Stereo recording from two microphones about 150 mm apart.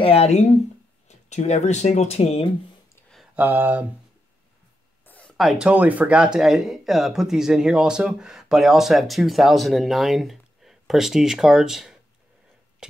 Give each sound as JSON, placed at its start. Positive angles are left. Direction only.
{"t": 0.0, "sound": "speech", "side_deg": 40}
{"t": 3.3, "sound": "speech", "side_deg": -10}
{"t": 5.0, "sound": "a sound", "side_deg": 10}
{"t": 5.4, "sound": "speech", "side_deg": -5}